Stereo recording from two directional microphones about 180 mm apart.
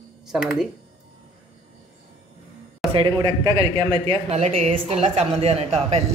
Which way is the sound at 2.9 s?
30° right (ahead or behind).